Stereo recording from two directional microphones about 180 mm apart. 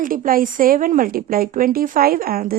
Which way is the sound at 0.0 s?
50° right (ahead or behind).